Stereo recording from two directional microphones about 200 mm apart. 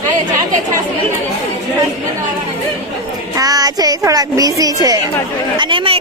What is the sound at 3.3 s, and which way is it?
Speech, 20° right (ahead or behind).